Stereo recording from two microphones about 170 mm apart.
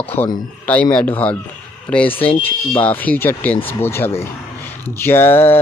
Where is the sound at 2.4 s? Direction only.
10° left (ahead or behind).